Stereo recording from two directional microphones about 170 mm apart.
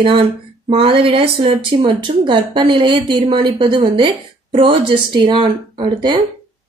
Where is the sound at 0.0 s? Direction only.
35° right (ahead or behind).